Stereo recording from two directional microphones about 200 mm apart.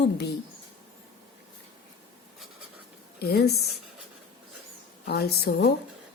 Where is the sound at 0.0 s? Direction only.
55° left (ahead or behind).